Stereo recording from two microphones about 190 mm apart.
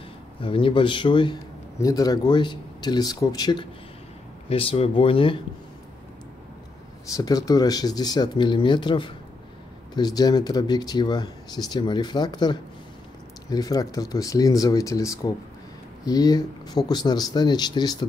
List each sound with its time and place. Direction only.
0.4 s a man's voice: 25° left (ahead or behind)
7.1 s a man's voice: 20° left (ahead or behind)